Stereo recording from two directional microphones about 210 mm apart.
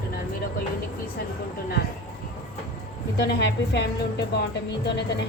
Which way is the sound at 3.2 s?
55° left (ahead or behind).